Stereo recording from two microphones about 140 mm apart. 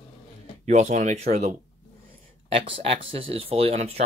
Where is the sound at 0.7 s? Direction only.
60° right (ahead or behind).